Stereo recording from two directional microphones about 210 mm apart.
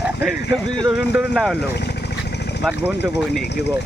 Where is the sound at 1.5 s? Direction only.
50° left (ahead or behind).